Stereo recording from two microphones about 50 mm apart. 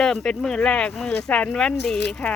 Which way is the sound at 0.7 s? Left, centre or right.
Left.